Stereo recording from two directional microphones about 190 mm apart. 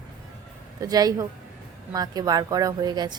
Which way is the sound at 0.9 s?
20° right (ahead or behind).